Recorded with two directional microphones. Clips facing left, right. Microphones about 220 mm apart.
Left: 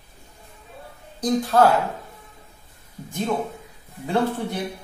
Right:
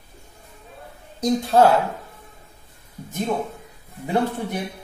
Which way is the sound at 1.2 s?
25° right (ahead or behind).